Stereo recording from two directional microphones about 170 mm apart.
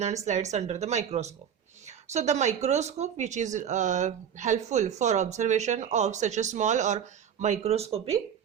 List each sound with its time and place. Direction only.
0.3 s speech: 45° right (ahead or behind)